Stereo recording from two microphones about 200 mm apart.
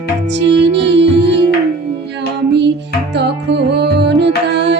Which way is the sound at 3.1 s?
60° right (ahead or behind).